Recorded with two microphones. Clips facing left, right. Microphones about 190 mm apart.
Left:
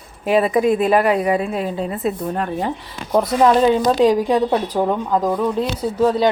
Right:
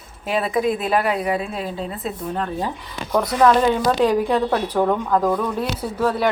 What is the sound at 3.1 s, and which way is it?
A woman's voice, 25° left (ahead or behind).